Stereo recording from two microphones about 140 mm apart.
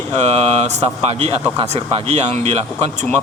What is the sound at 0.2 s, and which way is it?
Speech, 50° right (ahead or behind).